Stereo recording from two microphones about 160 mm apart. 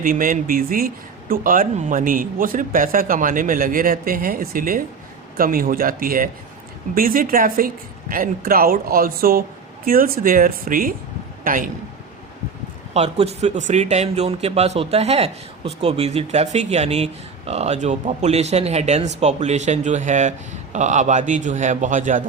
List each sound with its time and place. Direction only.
0.0 s speech: 60° right (ahead or behind)
12.9 s speech: 40° right (ahead or behind)